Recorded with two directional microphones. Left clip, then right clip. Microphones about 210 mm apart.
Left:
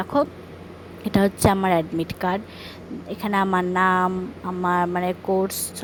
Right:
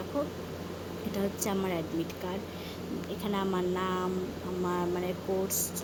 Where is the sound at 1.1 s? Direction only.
40° left (ahead or behind).